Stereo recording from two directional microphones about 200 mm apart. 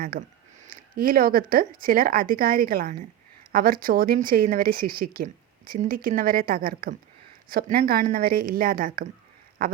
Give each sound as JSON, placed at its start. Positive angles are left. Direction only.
{"t": 0.0, "sound": "speech", "side_deg": -45}